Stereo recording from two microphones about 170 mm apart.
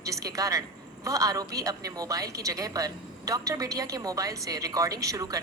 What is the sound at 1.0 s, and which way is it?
A man's voice, 20° right (ahead or behind).